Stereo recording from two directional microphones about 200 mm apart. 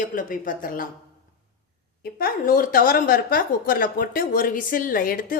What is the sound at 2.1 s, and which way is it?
A woman's voice, 45° left (ahead or behind).